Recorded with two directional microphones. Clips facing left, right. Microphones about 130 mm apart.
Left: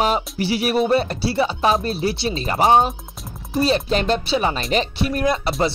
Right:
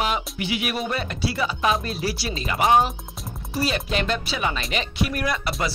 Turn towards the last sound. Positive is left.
turn(degrees=30)  # may be behind; listen again after turning